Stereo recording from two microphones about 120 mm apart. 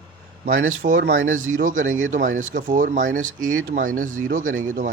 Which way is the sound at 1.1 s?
90° right.